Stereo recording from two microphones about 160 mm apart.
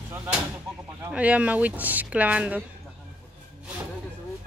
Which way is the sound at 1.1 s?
10° right (ahead or behind).